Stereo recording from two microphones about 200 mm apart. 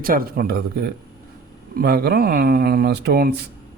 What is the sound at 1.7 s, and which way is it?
A man's voice, 50° right (ahead or behind).